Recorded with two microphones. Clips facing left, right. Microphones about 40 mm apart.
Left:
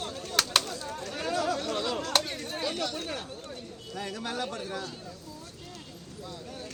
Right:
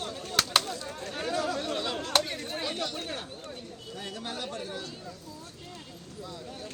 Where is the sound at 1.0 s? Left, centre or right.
Right.